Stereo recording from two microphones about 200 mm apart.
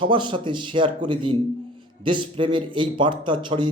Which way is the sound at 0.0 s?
25° right (ahead or behind).